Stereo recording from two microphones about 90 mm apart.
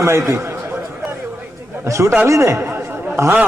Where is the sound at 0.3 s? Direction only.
30° right (ahead or behind).